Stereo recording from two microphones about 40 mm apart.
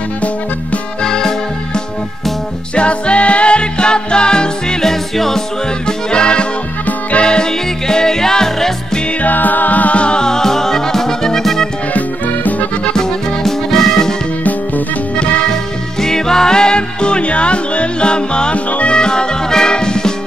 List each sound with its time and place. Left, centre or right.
1.0 s music: centre
2.7 s music: left
5.1 s music: centre
5.9 s music: left
6.9 s music: left
7.2 s music: centre
9.2 s music: left
10.0 s music: centre
11.9 s music: left
12.9 s music: centre
15.1 s music: left
16.0 s music: centre; by 18.9 s left
18.9 s music: centre